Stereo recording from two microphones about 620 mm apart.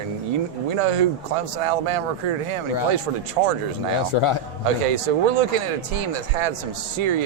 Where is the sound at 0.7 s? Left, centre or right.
Right.